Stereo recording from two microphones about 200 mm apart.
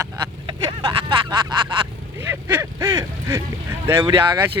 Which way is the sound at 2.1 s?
10° right (ahead or behind).